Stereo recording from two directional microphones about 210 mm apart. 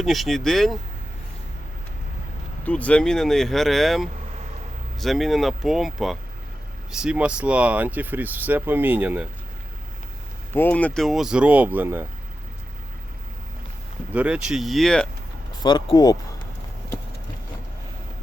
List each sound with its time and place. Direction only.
0.0 s speech: centre (ahead or behind)
2.6 s speech: 5° left (ahead or behind)
10.5 s speech: 10° left (ahead or behind); by 12.0 s 10° right (ahead or behind)
14.1 s speech: 5° right (ahead or behind)
15.6 s speech: 20° left (ahead or behind)